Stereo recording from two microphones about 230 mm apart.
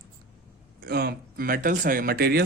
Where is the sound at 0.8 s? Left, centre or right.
Right.